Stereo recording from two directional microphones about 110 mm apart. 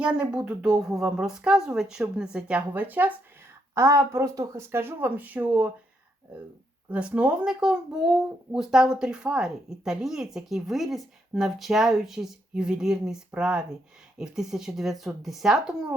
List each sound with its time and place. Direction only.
0.0 s speech: 10° right (ahead or behind)
3.8 s speech: 25° right (ahead or behind)
6.9 s speech: 10° right (ahead or behind)